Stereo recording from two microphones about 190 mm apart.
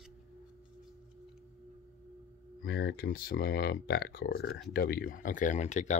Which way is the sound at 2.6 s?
55° left (ahead or behind).